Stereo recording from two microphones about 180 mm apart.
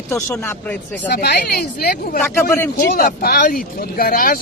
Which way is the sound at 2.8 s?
55° left (ahead or behind).